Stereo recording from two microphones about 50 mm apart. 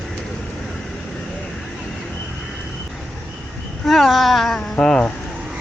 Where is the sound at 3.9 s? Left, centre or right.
Centre.